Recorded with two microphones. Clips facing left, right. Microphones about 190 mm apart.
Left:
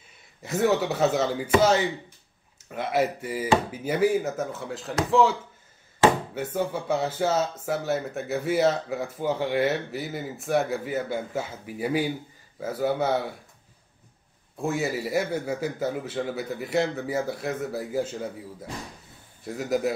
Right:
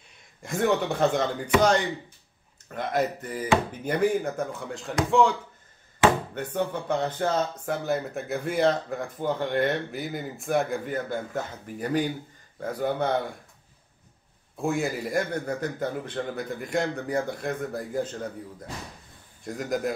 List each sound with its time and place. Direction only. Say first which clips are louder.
0.4 s speech: left 1 dB; 5° left (ahead or behind)
14.6 s speech: even; centre (ahead or behind)